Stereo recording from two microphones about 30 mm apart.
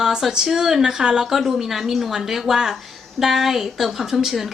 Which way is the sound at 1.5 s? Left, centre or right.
Centre.